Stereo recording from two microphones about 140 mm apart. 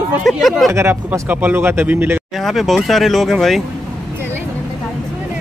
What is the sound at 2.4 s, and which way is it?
Speech, centre (ahead or behind).